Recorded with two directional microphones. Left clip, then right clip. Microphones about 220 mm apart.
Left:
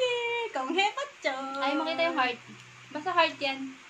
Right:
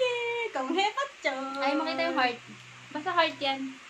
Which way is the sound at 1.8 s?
10° right (ahead or behind).